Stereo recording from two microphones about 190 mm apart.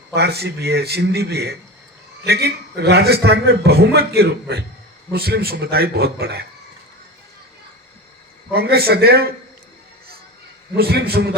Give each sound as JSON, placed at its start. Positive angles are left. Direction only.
{"t": 0.1, "sound": "a man's voice", "side_deg": -60}
{"t": 8.5, "sound": "a man's voice", "side_deg": -55}
{"t": 10.8, "sound": "a man's voice", "side_deg": -55}